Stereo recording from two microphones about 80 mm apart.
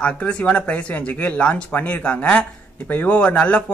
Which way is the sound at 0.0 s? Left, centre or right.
Centre.